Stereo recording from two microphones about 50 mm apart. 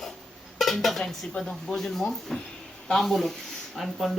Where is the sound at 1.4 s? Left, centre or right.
Centre.